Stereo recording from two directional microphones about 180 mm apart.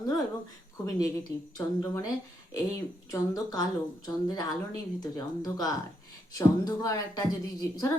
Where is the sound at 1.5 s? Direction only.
20° left (ahead or behind).